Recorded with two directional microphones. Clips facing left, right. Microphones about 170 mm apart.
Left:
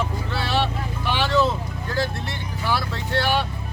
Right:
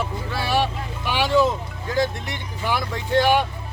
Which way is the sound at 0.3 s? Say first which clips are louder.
Right 3 dB; 10° right (ahead or behind).